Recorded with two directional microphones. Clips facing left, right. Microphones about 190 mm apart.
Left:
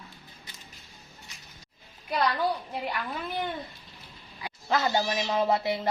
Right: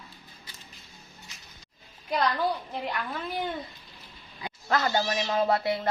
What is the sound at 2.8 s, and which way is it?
Speech, 5° left (ahead or behind).